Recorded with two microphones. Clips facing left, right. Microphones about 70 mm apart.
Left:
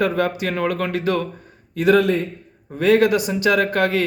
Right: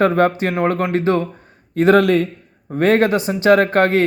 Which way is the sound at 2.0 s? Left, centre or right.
Right.